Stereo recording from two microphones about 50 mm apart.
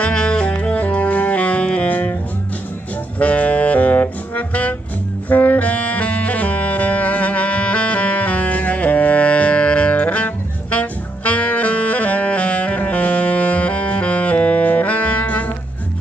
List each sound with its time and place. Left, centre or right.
0.0 s saxophone: centre; by 2.1 s left
3.2 s saxophone: left